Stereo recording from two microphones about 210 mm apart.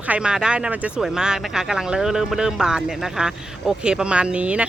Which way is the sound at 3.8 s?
5° right (ahead or behind).